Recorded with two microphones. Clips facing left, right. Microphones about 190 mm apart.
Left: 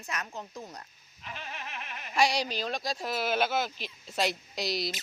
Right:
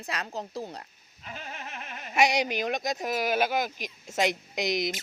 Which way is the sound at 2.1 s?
20° right (ahead or behind).